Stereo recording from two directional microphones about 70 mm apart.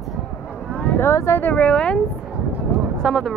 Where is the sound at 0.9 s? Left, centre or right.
Left.